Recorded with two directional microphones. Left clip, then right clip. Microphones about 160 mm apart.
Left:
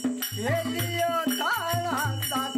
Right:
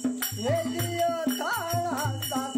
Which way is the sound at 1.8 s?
10° right (ahead or behind).